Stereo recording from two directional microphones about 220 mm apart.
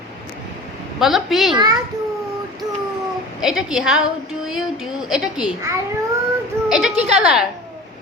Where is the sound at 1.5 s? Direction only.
15° right (ahead or behind).